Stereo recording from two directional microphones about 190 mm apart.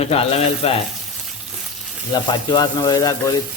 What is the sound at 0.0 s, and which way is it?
Speech, 30° left (ahead or behind).